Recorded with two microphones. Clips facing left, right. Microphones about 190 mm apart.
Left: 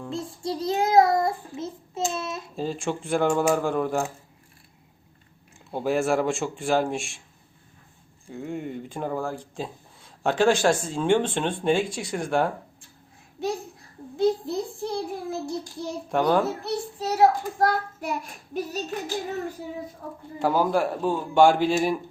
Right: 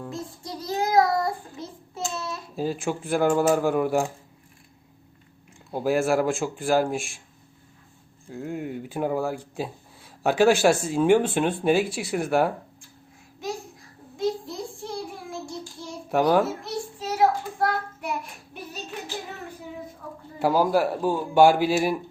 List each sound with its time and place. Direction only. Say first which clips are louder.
0.1 s child singing: left 5 dB; 25° left (ahead or behind)
2.6 s speech: right 2 dB; 5° right (ahead or behind)
5.7 s speech: right 1 dB; centre (ahead or behind)
8.3 s speech: right 1 dB; centre (ahead or behind)
13.4 s a sound: left 4 dB; 35° left (ahead or behind)
14.2 s child singing: left 4 dB; 35° left (ahead or behind)
16.0 s a child's voice: right 2 dB; 5° right (ahead or behind)
16.6 s child singing: left 3 dB; 35° left (ahead or behind)
18.5 s a sound: left 7 dB; 40° left (ahead or behind)
20.4 s speech: right 1 dB; 5° right (ahead or behind)